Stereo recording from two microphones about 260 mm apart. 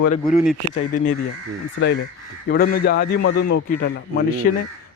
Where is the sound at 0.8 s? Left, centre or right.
Left.